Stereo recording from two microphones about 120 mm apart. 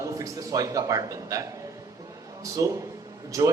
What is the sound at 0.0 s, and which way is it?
A man's voice, 30° right (ahead or behind).